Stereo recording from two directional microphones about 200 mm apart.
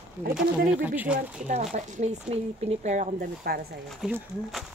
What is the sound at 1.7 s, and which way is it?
Speech, 35° right (ahead or behind).